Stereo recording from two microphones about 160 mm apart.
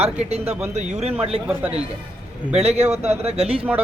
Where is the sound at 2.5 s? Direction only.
40° right (ahead or behind).